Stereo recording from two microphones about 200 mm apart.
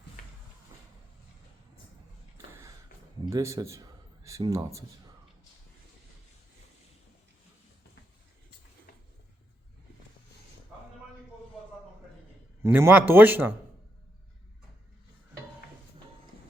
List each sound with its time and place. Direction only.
3.2 s a man's voice: 15° right (ahead or behind)
12.6 s speech: 10° right (ahead or behind)